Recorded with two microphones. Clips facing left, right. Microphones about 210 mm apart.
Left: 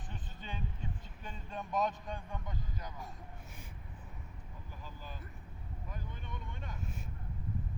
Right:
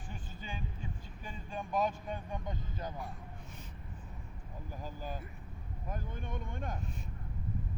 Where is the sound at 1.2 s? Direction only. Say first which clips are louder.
Right 2 dB; 5° right (ahead or behind).